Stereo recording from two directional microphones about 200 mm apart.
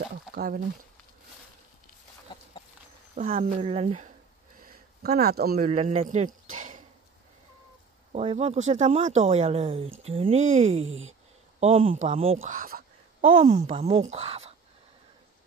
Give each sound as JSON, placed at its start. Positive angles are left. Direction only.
{"t": 0.3, "sound": "speech", "side_deg": -45}
{"t": 3.2, "sound": "speech", "side_deg": -40}
{"t": 3.5, "sound": "speech", "side_deg": -30}
{"t": 4.6, "sound": "a sound", "side_deg": -45}
{"t": 5.7, "sound": "speech", "side_deg": -35}
{"t": 8.1, "sound": "speech", "side_deg": -30}
{"t": 13.3, "sound": "speech", "side_deg": -25}